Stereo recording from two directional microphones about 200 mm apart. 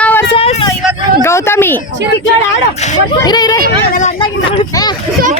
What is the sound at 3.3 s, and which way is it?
Speech, 20° left (ahead or behind).